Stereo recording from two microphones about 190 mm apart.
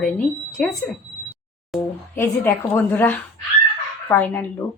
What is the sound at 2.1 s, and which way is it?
Speech, 10° left (ahead or behind).